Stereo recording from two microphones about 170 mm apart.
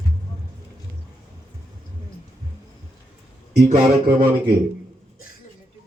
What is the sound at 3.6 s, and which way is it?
Speech, 60° right (ahead or behind).